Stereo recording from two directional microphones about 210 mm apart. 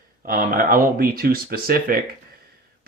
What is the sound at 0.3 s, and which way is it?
Speech, 40° right (ahead or behind).